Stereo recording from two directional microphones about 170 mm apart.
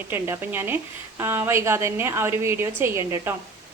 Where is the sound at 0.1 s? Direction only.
15° right (ahead or behind).